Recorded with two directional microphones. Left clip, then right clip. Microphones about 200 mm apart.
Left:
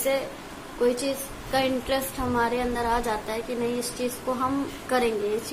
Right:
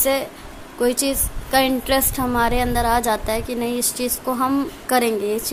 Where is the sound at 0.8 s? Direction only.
60° right (ahead or behind).